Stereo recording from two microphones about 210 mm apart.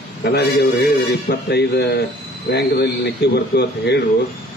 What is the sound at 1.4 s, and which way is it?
A man's voice, 50° left (ahead or behind).